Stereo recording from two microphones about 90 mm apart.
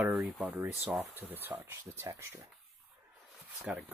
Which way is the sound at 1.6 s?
25° right (ahead or behind).